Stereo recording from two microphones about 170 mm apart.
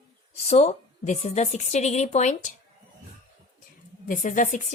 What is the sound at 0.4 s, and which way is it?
A woman's voice, 40° left (ahead or behind).